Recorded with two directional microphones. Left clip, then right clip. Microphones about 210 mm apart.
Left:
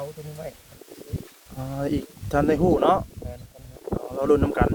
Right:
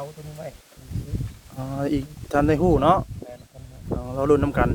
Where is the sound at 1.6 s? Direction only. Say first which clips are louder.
Right 2 dB; 20° right (ahead or behind).